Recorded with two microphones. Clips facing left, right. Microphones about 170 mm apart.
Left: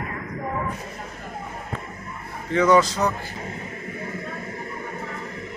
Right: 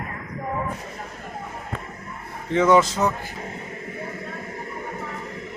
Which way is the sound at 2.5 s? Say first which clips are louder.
Even; 25° right (ahead or behind).